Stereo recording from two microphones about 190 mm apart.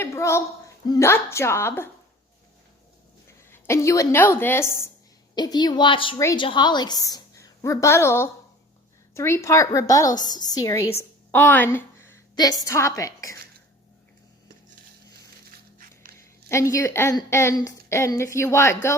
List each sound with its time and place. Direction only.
0.0 s a woman's voice: 15° left (ahead or behind)
3.5 s a woman's voice: 15° left (ahead or behind)
16.5 s a woman's voice: 15° left (ahead or behind)